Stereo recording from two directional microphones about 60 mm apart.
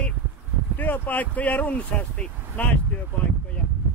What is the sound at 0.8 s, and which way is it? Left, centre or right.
Speech, left.